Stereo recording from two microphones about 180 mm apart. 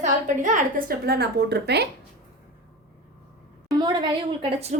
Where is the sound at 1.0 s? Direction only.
65° right (ahead or behind).